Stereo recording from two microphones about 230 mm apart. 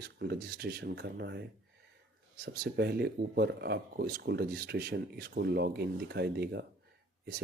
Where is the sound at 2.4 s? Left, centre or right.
Right.